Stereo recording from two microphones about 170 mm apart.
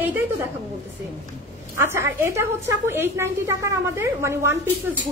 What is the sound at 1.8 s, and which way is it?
Speech, 15° right (ahead or behind).